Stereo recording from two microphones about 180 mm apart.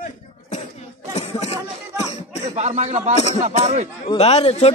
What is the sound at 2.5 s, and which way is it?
Speech, 35° right (ahead or behind).